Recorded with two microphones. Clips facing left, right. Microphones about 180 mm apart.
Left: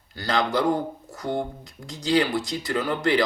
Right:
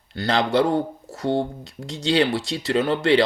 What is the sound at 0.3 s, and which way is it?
Speech, 30° right (ahead or behind).